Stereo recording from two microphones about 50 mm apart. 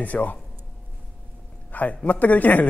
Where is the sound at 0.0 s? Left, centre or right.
Left.